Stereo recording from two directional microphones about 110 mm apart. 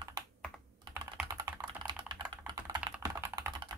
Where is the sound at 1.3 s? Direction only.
30° right (ahead or behind).